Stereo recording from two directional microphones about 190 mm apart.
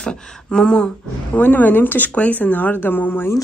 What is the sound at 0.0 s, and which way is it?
Speech, 5° left (ahead or behind).